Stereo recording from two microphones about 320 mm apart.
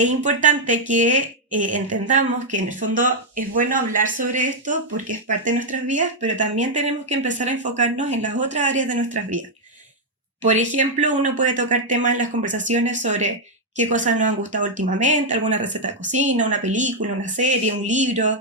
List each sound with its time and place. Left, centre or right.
0.0 s a woman's voice: right
10.4 s a woman's voice: right